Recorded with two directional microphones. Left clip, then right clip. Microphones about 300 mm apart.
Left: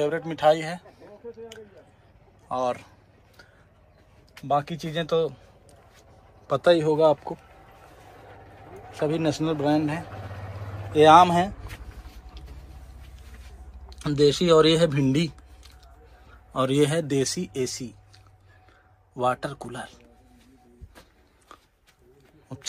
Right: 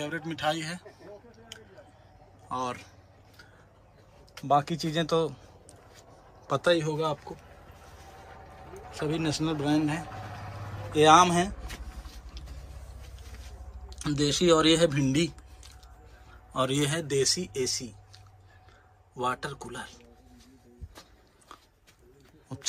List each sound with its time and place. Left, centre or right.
0.0 s a man's voice: centre
2.5 s a man's voice: centre
4.5 s a man's voice: centre
8.9 s a man's voice: centre
13.8 s a man's voice: centre
21.5 s a sound: centre
22.5 s speech: centre